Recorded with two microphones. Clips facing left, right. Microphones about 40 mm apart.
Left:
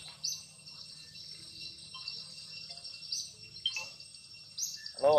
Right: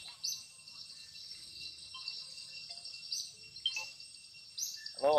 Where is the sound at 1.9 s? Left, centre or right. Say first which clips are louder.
Left 1 dB; centre.